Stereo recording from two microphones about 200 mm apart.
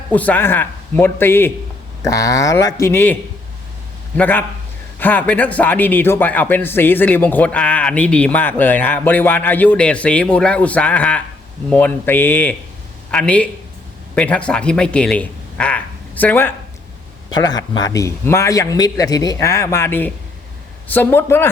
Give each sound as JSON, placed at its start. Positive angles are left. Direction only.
{"t": 0.1, "sound": "a man's voice", "side_deg": 10}
{"t": 4.2, "sound": "a man's voice", "side_deg": 10}
{"t": 17.4, "sound": "a man's voice", "side_deg": 20}